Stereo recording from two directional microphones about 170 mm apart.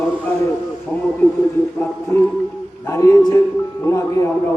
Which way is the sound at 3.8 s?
15° left (ahead or behind).